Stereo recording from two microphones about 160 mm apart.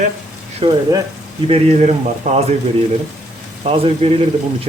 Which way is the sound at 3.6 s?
35° right (ahead or behind).